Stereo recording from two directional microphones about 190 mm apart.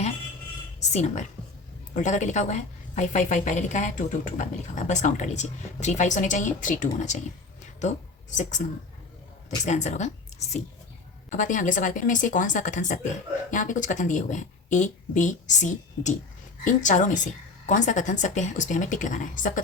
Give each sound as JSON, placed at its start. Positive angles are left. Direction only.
{"t": 0.8, "sound": "a woman's voice", "side_deg": 35}
{"t": 9.6, "sound": "a woman's voice", "side_deg": 40}
{"t": 11.3, "sound": "a woman's voice", "side_deg": 45}